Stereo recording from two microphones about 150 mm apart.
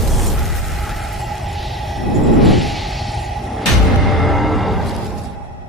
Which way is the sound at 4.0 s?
Centre (ahead or behind).